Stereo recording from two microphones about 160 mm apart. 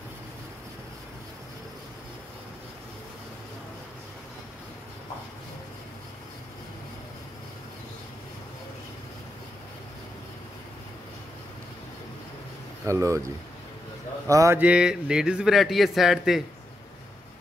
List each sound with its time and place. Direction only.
12.8 s speech: 20° right (ahead or behind)
14.6 s a man's voice: 5° right (ahead or behind)